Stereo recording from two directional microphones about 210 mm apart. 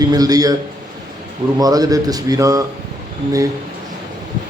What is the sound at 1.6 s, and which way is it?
A man's voice, 15° right (ahead or behind).